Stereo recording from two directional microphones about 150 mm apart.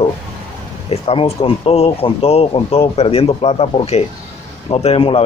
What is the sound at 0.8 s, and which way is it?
Speech, 40° left (ahead or behind).